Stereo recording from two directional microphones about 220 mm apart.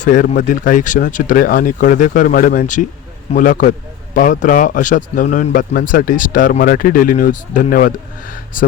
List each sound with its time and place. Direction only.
0.0 s speech: 35° left (ahead or behind)